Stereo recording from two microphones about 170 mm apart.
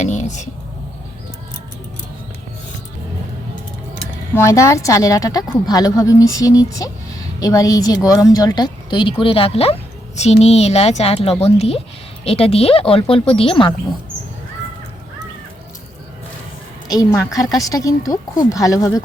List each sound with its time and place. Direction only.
0.0 s whispering: 45° left (ahead or behind)
4.4 s a woman's voice: 15° left (ahead or behind)
16.9 s a woman's voice: 20° left (ahead or behind)